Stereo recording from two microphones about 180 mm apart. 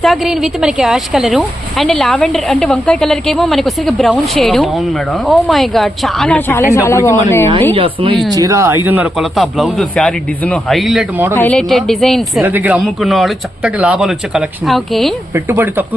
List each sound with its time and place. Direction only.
0.0 s a woman's voice: centre (ahead or behind); by 7.4 s 15° left (ahead or behind)
7.8 s speech: 30° right (ahead or behind)
8.3 s a woman's voice: 20° right (ahead or behind); by 12.2 s centre (ahead or behind)
12.4 s a woman's voice: 10° right (ahead or behind)
15.4 s speech: 10° right (ahead or behind)